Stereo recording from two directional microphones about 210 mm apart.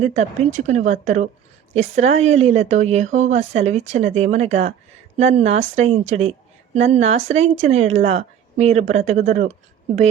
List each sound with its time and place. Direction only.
0.0 s speech: 35° right (ahead or behind)